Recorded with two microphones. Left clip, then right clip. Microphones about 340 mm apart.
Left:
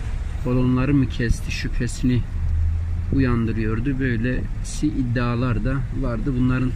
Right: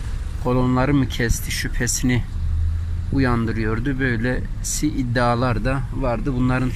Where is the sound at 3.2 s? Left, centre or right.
Centre.